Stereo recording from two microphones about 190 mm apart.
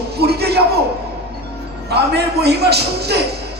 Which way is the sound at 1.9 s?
60° right (ahead or behind).